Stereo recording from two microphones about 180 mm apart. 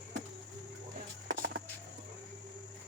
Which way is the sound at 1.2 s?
55° right (ahead or behind).